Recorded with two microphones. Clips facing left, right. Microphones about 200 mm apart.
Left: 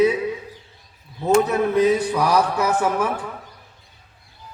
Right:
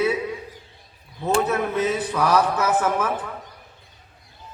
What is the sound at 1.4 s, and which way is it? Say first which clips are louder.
A man's voice: left 5 dB; 15° left (ahead or behind).